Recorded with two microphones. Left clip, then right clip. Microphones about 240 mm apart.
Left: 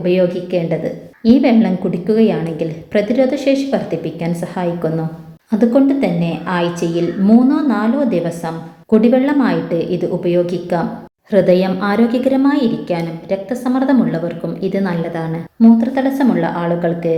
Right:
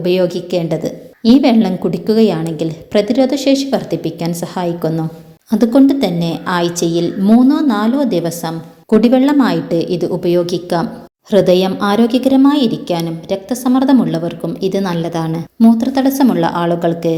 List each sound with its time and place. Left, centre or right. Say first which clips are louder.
0.0 s a woman's voice: even; right